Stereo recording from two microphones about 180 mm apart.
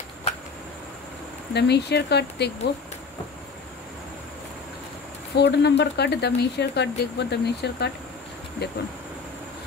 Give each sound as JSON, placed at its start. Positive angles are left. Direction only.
{"t": 1.5, "sound": "speech", "side_deg": 70}
{"t": 5.3, "sound": "speech", "side_deg": 70}